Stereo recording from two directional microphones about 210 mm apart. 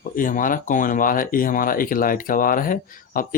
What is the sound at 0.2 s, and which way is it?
Speech, 40° left (ahead or behind).